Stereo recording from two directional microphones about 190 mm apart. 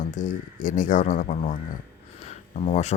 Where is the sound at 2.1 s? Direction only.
35° left (ahead or behind).